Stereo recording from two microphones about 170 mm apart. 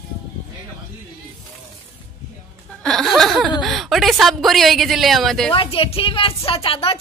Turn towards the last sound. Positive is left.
turn(degrees=30)  # may be behind; listen again after turning